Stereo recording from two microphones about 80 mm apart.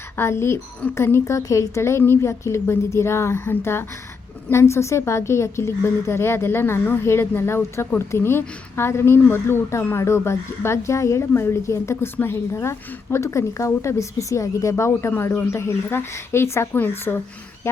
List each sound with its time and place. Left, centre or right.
0.2 s a woman's voice: left